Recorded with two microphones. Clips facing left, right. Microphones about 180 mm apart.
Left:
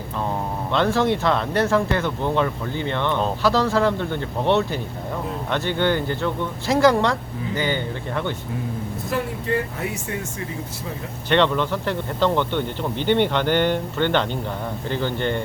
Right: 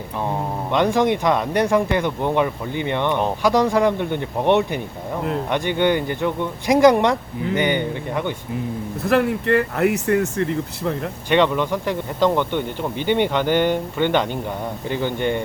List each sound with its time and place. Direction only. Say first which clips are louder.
0.7 s speech: right 2 dB; 15° right (ahead or behind)
9.0 s speech: right 8 dB; 70° right (ahead or behind)
11.3 s speech: right 1 dB; 10° right (ahead or behind)